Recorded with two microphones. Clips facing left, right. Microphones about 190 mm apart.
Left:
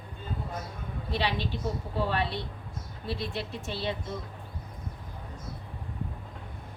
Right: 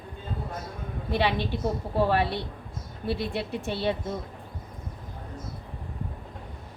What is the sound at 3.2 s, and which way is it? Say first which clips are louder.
Speech: right 4 dB; 60° right (ahead or behind).